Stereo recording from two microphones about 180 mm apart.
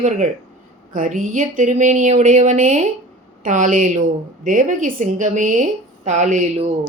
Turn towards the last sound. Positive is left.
turn(degrees=-45)  # may be behind; listen again after turning